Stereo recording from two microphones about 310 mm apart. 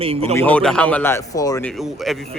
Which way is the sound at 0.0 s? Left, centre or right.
Centre.